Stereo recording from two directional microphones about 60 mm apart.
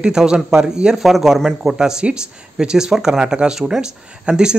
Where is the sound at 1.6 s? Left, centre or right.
Centre.